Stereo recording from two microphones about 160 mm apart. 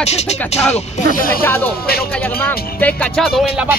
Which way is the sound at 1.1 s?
60° left (ahead or behind).